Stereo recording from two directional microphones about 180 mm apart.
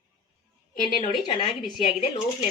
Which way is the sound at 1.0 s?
25° left (ahead or behind).